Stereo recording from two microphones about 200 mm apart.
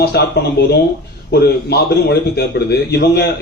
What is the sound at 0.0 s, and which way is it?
Speech, 55° left (ahead or behind).